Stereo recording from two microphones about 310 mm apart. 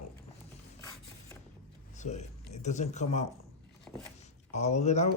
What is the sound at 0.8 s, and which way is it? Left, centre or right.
Mechanisms, centre.